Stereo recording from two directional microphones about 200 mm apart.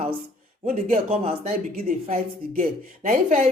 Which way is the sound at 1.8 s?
45° right (ahead or behind).